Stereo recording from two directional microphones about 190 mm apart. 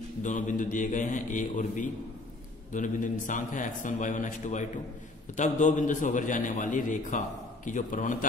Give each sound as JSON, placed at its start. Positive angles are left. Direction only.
{"t": 0.2, "sound": "a man's voice", "side_deg": 40}